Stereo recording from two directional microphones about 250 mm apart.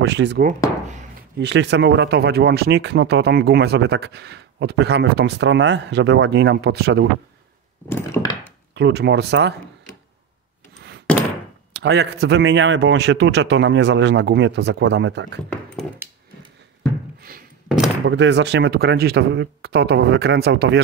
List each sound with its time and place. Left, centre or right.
0.0 s speech: right
7.9 s wood: centre
8.7 s speech: right
11.1 s thunk: centre
11.7 s speech: right
15.5 s dog: centre
17.2 s thunk: right
17.6 s door: centre
18.0 s speech: right